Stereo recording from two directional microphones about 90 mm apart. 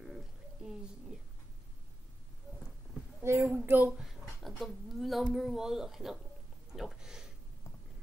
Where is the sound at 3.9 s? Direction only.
5° right (ahead or behind).